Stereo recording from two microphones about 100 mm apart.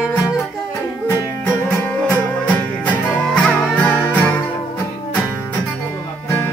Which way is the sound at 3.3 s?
10° left (ahead or behind).